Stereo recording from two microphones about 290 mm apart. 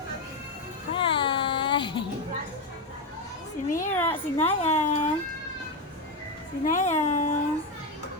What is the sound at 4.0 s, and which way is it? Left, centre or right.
Speech, centre.